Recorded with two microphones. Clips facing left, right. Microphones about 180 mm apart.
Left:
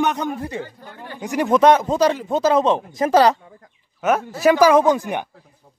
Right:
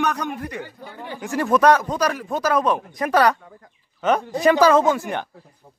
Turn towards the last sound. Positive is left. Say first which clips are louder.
# left 3 dB
turn(degrees=15)  # may be behind; listen again after turning